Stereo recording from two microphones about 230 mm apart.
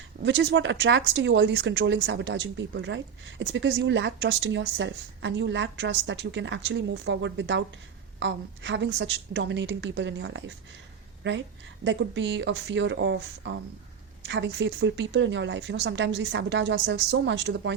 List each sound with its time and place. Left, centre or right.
0.3 s a woman's voice: right